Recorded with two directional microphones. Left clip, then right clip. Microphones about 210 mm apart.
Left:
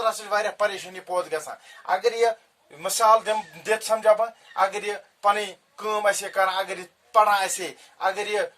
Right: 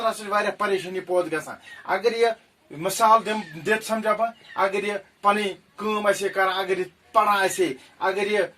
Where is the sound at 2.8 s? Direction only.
40° left (ahead or behind).